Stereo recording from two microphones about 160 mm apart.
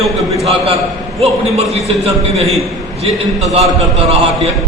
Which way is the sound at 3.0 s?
40° right (ahead or behind).